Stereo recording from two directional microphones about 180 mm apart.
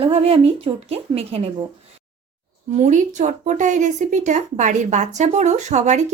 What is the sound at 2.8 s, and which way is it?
Speech, 45° right (ahead or behind).